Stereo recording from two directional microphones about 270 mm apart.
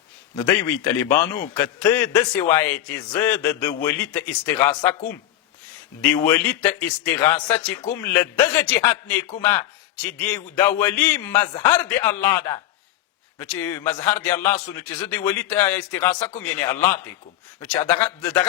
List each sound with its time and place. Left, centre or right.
0.3 s a man's voice: centre
6.2 s a man's voice: centre